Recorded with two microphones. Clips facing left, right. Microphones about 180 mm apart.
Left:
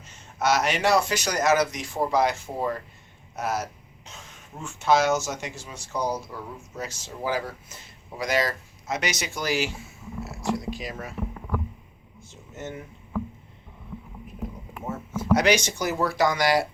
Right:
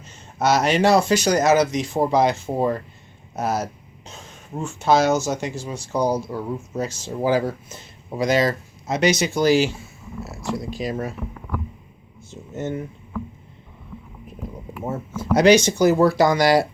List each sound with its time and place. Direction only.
0.3 s speech: 30° right (ahead or behind)
12.5 s speech: 35° right (ahead or behind)
15.4 s speech: 30° right (ahead or behind)